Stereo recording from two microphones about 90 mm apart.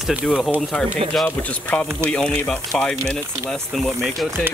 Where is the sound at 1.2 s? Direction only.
15° left (ahead or behind).